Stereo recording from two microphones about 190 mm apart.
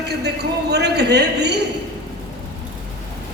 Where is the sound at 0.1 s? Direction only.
60° right (ahead or behind).